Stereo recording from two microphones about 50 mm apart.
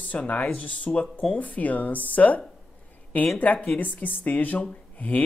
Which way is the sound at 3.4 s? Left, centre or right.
Left.